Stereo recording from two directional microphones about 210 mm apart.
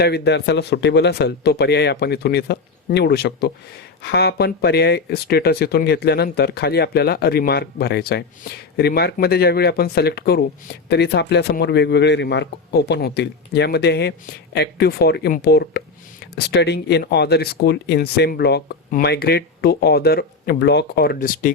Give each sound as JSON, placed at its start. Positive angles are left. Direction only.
{"t": 0.0, "sound": "speech", "side_deg": 55}